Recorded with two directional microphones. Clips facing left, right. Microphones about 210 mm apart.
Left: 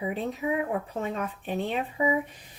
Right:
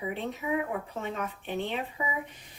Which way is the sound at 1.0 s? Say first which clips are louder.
Left 3 dB; 35° left (ahead or behind).